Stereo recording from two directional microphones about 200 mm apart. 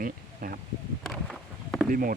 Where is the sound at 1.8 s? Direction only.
45° right (ahead or behind).